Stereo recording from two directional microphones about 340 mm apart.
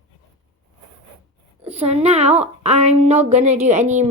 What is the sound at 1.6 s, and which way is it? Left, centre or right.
A woman's voice, centre.